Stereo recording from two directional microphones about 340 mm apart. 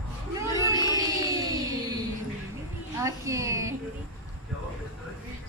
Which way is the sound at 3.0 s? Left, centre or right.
Centre.